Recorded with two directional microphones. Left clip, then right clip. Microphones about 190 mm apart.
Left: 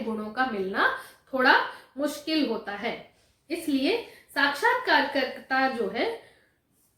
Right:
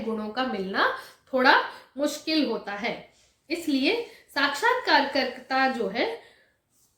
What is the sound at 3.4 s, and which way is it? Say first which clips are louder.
A woman's voice: right 1 dB; 40° right (ahead or behind).